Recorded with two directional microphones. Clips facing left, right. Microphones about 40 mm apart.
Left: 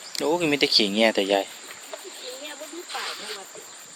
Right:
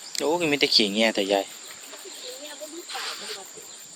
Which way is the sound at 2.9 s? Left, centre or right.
Centre.